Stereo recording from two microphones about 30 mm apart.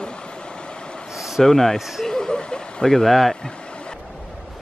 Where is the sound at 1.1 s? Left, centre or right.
Centre.